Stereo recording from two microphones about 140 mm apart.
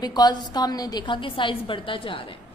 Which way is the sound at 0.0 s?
30° left (ahead or behind).